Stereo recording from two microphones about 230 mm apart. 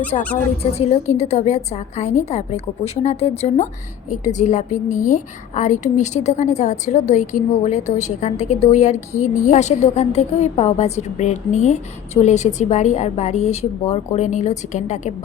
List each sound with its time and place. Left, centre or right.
0.1 s a woman's voice: left